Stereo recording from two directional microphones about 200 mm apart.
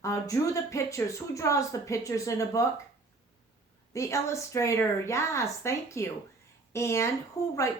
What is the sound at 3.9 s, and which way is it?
Speech, 15° left (ahead or behind).